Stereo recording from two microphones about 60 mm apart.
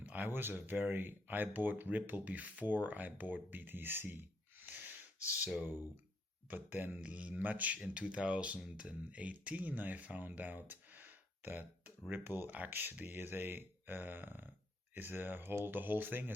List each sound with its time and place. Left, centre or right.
0.0 s a sound: right
0.3 s speech: right
6.5 s speech: right
7.0 s speech: right